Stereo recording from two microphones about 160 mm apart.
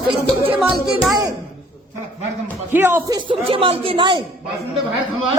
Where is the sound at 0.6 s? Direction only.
Centre (ahead or behind).